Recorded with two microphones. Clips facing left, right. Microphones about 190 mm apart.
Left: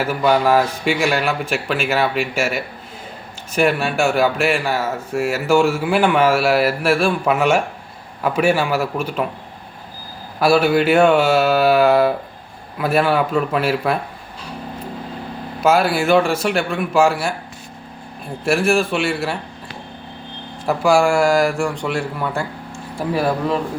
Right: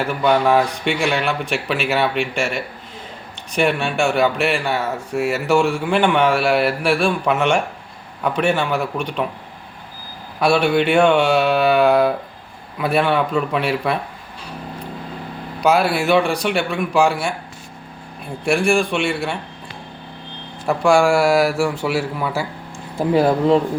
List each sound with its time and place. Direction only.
0.0 s speech: 5° left (ahead or behind)
10.4 s speech: centre (ahead or behind)
15.6 s speech: centre (ahead or behind)
18.4 s speech: centre (ahead or behind)
20.7 s speech: centre (ahead or behind)
23.0 s speech: 20° right (ahead or behind)